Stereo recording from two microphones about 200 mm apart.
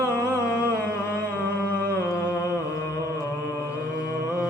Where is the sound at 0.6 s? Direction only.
45° right (ahead or behind).